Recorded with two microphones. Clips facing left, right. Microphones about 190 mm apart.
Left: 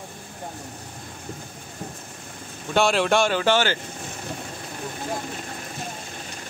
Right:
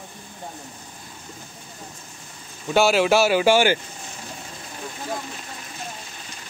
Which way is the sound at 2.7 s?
5° right (ahead or behind).